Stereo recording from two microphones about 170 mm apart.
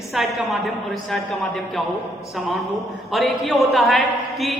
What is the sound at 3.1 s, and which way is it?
Speech, centre (ahead or behind).